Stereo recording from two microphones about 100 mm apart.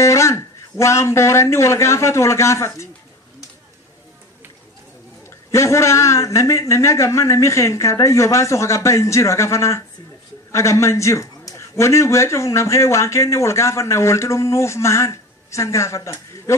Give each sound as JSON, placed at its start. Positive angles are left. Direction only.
{"t": 0.0, "sound": "a man's voice", "side_deg": 30}
{"t": 5.5, "sound": "a man's voice", "side_deg": 30}